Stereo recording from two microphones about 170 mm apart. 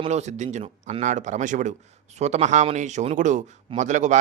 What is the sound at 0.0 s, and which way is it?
Speech, 40° right (ahead or behind).